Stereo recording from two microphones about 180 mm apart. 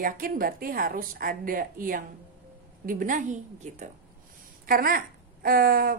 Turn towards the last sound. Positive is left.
turn(degrees=-50)  # may be behind; listen again after turning